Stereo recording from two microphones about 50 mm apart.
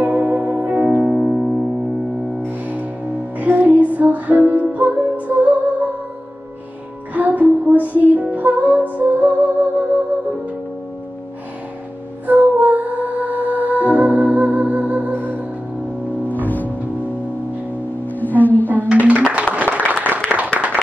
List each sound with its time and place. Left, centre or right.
0.0 s music: right
0.8 s music: right
2.4 s music: right
7.2 s music: right
12.3 s music: right
16.3 s music: left
18.0 s music: left
18.9 s a sound: right
19.5 s applause: right
20.5 s a sound: right